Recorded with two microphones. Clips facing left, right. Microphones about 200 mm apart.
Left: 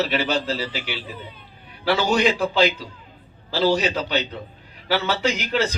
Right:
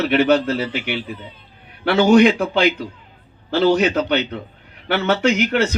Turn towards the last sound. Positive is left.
turn(degrees=-60)  # may be behind; listen again after turning